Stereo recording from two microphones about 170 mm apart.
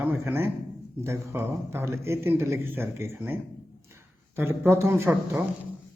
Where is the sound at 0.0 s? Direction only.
10° right (ahead or behind).